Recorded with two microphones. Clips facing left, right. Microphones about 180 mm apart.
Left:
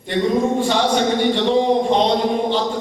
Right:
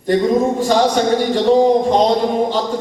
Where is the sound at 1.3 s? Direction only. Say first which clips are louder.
Right 7 dB; 40° right (ahead or behind).